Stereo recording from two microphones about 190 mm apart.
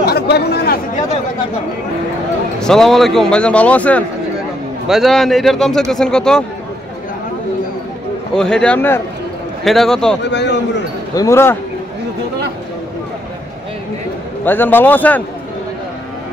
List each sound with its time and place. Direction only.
0.0 s speech: 55° left (ahead or behind)
2.6 s speech: centre (ahead or behind)
8.4 s speech: 5° left (ahead or behind)
10.3 s a man's voice: 65° left (ahead or behind)
11.1 s speech: 15° left (ahead or behind)
14.4 s speech: 10° left (ahead or behind)